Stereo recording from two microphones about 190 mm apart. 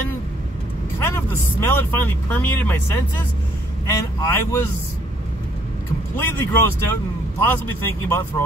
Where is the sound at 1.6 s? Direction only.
10° left (ahead or behind).